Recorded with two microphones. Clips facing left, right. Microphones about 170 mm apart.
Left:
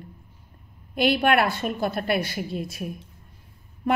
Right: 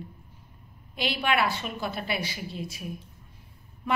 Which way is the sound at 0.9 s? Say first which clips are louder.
Left 7 dB; 55° left (ahead or behind).